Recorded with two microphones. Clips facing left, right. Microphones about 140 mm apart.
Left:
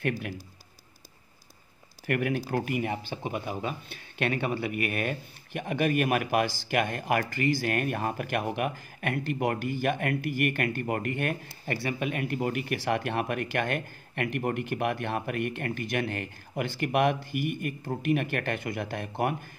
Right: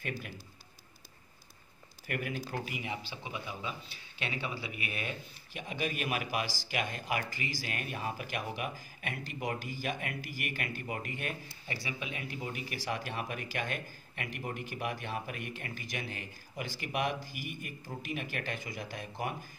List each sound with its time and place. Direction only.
2.0 s speech: 65° left (ahead or behind)